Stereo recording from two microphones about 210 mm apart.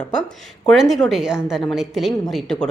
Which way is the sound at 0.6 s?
Centre (ahead or behind).